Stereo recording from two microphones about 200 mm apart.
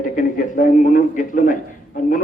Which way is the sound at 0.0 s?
40° left (ahead or behind).